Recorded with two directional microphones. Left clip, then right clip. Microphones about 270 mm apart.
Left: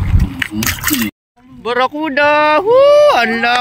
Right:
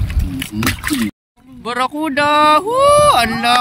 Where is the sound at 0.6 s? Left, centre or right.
Left.